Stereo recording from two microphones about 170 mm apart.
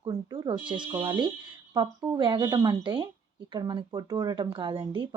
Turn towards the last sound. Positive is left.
turn(degrees=-30)  # may be behind; listen again after turning